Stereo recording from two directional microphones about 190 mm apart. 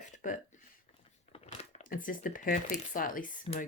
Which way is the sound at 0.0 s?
40° left (ahead or behind).